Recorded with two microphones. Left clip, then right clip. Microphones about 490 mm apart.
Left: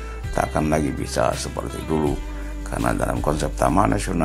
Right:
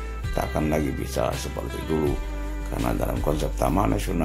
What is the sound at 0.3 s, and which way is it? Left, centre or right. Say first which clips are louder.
Speech: left 4 dB; right.